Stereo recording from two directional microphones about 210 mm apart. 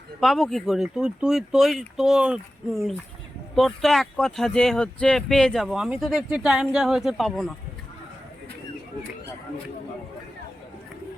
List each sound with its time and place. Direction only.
0.2 s speech: centre (ahead or behind)